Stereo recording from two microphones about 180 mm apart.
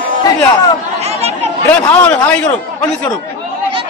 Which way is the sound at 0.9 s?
35° right (ahead or behind).